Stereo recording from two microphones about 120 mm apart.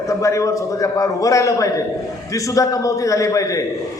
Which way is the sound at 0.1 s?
25° left (ahead or behind).